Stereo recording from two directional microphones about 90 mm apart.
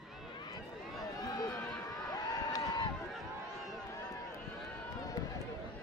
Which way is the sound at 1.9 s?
45° left (ahead or behind).